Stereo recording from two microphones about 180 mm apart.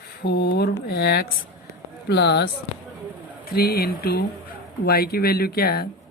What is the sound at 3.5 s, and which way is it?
Speech, 55° left (ahead or behind).